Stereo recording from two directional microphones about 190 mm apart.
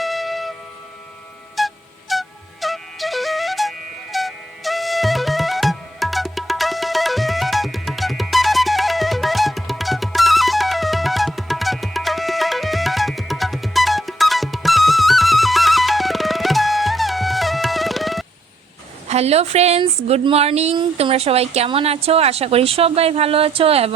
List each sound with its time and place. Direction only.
0.0 s music: centre (ahead or behind)
1.5 s music: centre (ahead or behind)
19.0 s speech: 35° right (ahead or behind)